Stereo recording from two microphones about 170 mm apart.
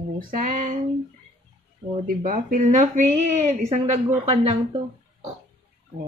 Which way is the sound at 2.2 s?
50° right (ahead or behind).